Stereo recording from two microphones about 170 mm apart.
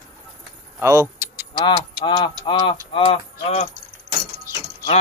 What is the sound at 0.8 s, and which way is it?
Keys jangling, 15° right (ahead or behind).